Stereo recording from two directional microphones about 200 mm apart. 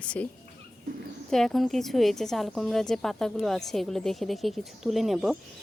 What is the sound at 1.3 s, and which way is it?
A woman's voice, centre (ahead or behind).